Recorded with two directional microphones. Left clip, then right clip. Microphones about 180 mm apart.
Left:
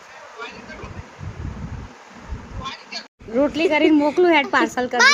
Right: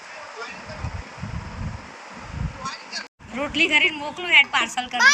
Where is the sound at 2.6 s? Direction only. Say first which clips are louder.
Left 1 dB; 5° left (ahead or behind).